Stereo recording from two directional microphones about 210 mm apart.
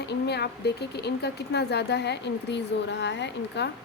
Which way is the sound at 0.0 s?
55° left (ahead or behind).